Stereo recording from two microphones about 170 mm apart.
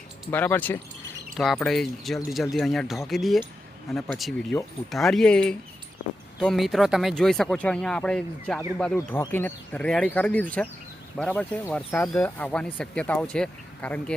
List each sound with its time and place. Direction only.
0.3 s speech: 10° left (ahead or behind)